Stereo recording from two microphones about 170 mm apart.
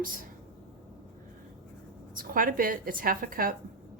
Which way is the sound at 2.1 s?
55° right (ahead or behind).